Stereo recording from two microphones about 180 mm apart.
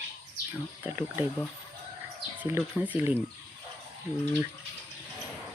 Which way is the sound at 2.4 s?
15° right (ahead or behind).